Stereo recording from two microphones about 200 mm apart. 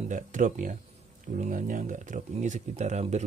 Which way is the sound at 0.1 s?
40° right (ahead or behind).